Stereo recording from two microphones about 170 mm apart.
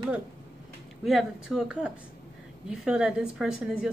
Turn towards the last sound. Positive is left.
turn(degrees=-5)  # may be behind; listen again after turning